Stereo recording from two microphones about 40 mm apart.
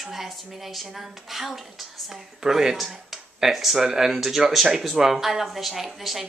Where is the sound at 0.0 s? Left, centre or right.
Centre.